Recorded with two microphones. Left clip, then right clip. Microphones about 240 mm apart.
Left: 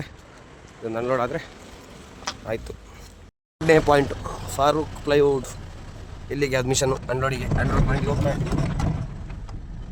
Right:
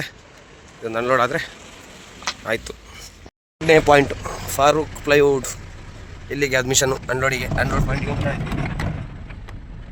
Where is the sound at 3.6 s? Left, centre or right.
Centre.